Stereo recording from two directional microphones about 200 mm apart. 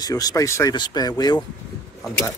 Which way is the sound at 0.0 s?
20° left (ahead or behind).